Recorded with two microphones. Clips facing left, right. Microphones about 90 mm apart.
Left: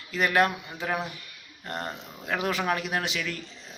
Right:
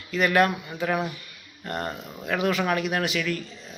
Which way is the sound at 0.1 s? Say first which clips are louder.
Right 3 dB; 30° left (ahead or behind).